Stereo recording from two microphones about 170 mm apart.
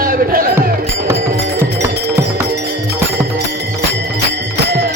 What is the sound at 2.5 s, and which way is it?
Music, 70° right (ahead or behind).